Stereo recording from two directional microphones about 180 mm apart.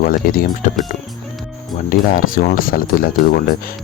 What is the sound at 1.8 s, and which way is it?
Speech, 50° left (ahead or behind).